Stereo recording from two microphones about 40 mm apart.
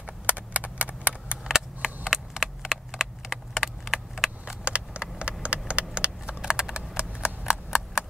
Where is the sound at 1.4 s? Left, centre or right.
Centre.